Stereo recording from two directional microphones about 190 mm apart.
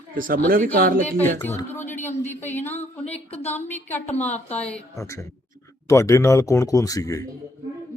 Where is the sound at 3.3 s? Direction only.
35° left (ahead or behind).